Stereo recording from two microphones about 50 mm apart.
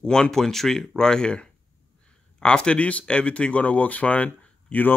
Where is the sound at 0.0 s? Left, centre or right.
Centre.